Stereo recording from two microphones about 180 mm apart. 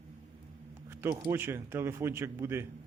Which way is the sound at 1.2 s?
10° right (ahead or behind).